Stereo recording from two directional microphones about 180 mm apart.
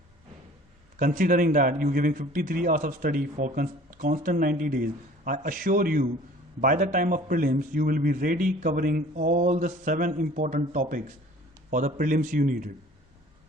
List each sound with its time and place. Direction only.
0.9 s a man's voice: 50° right (ahead or behind)